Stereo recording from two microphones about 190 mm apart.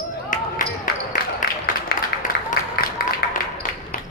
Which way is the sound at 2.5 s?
50° left (ahead or behind).